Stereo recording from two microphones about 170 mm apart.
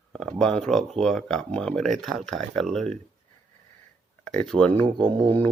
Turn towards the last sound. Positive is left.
turn(degrees=-25)  # may be behind; listen again after turning